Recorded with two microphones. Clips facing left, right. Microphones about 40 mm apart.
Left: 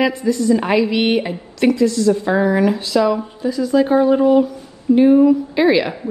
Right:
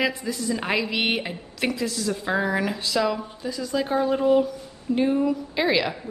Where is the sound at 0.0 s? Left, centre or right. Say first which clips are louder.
Left 9 dB; centre.